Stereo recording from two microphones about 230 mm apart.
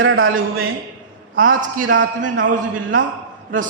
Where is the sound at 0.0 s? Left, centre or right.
Right.